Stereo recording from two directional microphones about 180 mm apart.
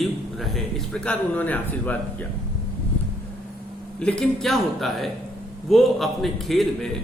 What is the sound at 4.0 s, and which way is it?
A man's voice, 5° left (ahead or behind).